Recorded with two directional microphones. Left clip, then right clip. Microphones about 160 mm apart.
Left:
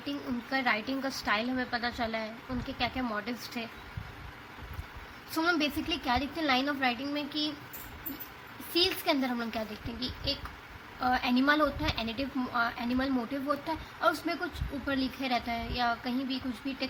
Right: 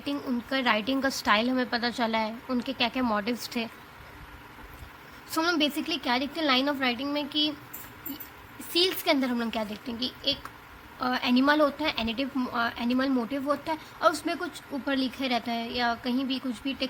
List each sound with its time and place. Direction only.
0.5 s a woman's voice: 45° right (ahead or behind)
5.3 s a woman's voice: 45° right (ahead or behind)
8.7 s a woman's voice: 35° right (ahead or behind)